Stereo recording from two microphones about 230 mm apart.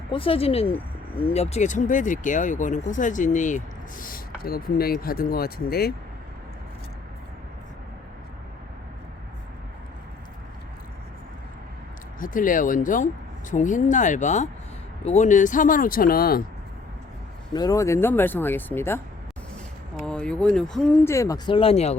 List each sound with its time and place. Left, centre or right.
0.1 s speech: left
12.2 s speech: left
17.5 s speech: centre
20.0 s speech: centre; by 21.9 s left